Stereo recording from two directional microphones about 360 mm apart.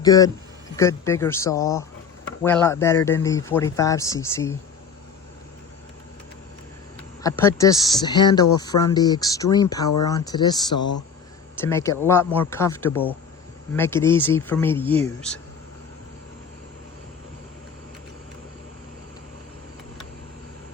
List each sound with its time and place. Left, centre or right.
0.0 s speech: centre
7.2 s speech: centre